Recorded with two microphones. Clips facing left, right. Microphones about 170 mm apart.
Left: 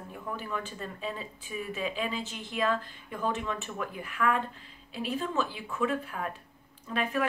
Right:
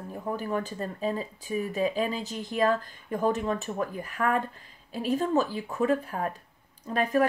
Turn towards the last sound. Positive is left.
turn(degrees=-40)  # may be behind; listen again after turning